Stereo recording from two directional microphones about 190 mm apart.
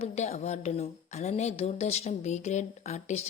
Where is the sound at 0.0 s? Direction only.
35° left (ahead or behind).